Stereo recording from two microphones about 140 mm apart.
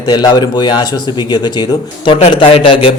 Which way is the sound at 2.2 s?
40° left (ahead or behind).